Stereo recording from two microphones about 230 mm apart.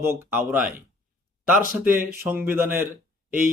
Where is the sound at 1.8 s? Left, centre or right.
Centre.